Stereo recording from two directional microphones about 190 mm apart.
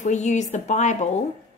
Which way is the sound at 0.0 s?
40° left (ahead or behind).